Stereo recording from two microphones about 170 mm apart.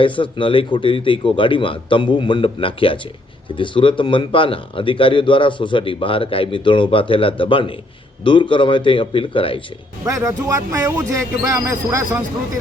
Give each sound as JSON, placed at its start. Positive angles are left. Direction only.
{"t": 0.0, "sound": "a man's voice", "side_deg": 30}
{"t": 10.1, "sound": "speech", "side_deg": -20}